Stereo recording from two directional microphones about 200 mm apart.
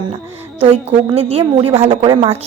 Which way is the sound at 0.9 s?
30° right (ahead or behind).